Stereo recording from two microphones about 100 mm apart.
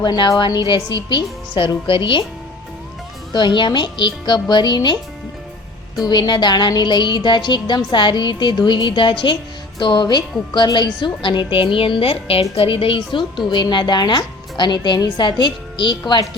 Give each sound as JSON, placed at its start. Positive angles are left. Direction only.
{"t": 0.0, "sound": "a woman's voice", "side_deg": 50}
{"t": 3.3, "sound": "a woman's voice", "side_deg": 50}
{"t": 6.1, "sound": "a woman's voice", "side_deg": 45}
{"t": 13.5, "sound": "a woman's voice", "side_deg": 50}